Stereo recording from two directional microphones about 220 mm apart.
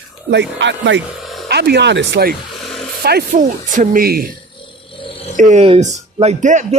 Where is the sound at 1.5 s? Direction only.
50° right (ahead or behind).